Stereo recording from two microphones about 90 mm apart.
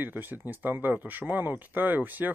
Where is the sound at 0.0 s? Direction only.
20° right (ahead or behind).